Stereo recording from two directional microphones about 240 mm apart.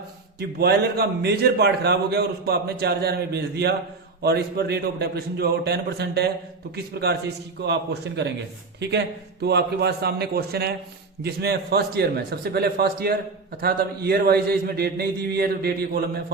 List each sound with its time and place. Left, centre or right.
0.3 s a man's voice: right